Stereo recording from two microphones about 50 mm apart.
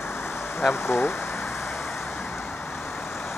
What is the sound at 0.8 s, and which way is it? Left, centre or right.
Speech, left.